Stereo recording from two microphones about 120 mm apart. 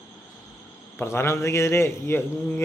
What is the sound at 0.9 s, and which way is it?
A man's voice, 20° left (ahead or behind).